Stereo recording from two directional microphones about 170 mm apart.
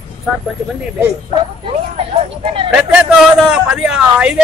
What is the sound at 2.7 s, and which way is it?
Speech, 5° right (ahead or behind).